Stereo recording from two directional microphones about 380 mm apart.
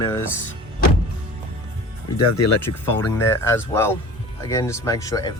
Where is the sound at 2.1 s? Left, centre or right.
Left.